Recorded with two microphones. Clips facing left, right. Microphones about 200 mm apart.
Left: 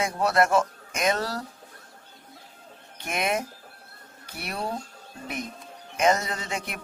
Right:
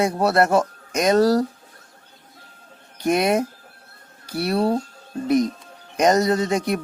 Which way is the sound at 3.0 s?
35° right (ahead or behind).